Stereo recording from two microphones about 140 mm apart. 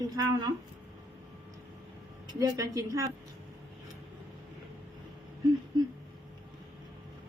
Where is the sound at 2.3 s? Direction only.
25° right (ahead or behind).